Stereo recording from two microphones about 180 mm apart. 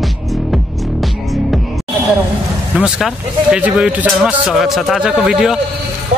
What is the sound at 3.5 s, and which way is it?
Speech, 5° right (ahead or behind).